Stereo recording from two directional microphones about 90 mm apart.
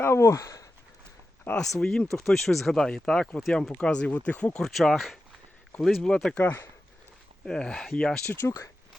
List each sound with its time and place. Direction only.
0.0 s speech: 30° left (ahead or behind)
1.5 s speech: 20° left (ahead or behind)
1.8 s speech: 5° left (ahead or behind)
4.6 s speech: 5° left (ahead or behind)
6.4 s speech: 20° left (ahead or behind)
7.4 s speech: 10° left (ahead or behind)
8.4 s speech: 35° left (ahead or behind)